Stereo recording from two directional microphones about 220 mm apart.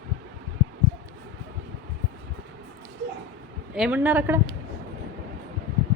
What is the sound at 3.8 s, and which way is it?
Speech, 5° right (ahead or behind).